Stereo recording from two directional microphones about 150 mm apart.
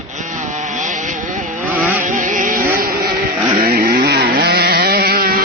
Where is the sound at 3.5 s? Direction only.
65° right (ahead or behind); by 5.4 s 85° right.